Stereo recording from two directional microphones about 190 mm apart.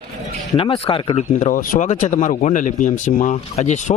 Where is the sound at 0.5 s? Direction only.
30° left (ahead or behind).